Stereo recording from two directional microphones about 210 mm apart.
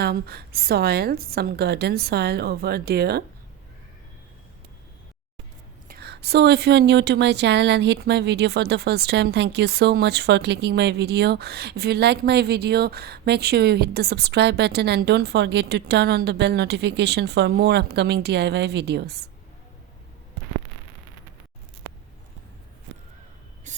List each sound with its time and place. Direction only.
0.0 s a woman's voice: 50° right (ahead or behind)
5.9 s a woman's voice: 50° right (ahead or behind)
23.7 s a sound: 35° right (ahead or behind)